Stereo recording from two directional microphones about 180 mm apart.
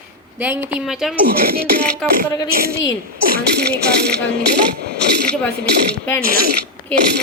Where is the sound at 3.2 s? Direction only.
55° right (ahead or behind).